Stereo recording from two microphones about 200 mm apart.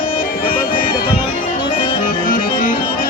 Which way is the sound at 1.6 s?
25° left (ahead or behind).